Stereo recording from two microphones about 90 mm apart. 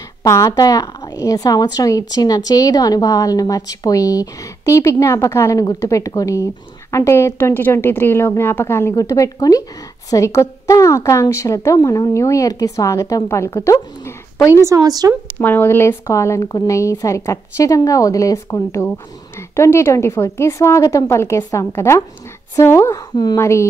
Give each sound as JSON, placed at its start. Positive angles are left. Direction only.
{"t": 0.2, "sound": "a woman's voice", "side_deg": 40}
{"t": 8.9, "sound": "a woman's voice", "side_deg": 40}
{"t": 14.5, "sound": "speech", "side_deg": -30}
{"t": 15.3, "sound": "a woman's voice", "side_deg": 20}